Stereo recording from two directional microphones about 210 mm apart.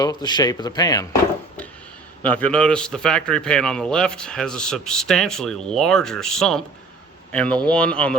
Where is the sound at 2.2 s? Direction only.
5° left (ahead or behind).